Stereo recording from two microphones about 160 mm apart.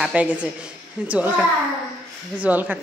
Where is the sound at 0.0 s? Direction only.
10° right (ahead or behind).